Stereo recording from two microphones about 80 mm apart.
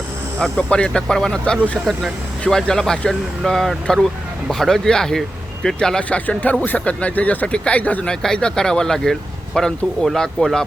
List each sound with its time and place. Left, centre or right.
0.3 s speech: centre
6.1 s speech: centre